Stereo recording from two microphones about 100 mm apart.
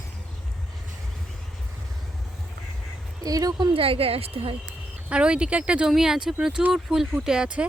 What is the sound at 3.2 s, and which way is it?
Speech, 40° right (ahead or behind).